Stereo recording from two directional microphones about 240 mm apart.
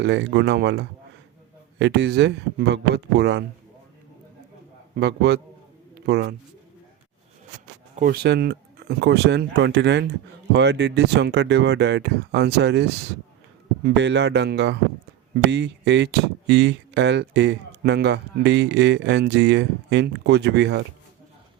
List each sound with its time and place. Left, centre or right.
0.0 s speech: right
4.9 s speech: right
7.9 s speech: right